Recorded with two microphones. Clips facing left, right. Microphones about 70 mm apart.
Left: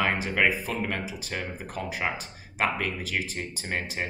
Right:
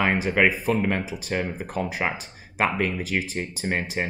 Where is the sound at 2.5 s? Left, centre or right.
Right.